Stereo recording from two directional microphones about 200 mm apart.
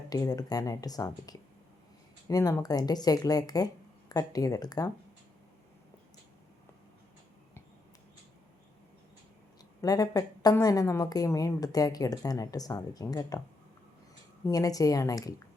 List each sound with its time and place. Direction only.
0.1 s speech: 20° left (ahead or behind)
9.8 s a woman's voice: 20° left (ahead or behind)
14.4 s a woman's voice: 20° left (ahead or behind)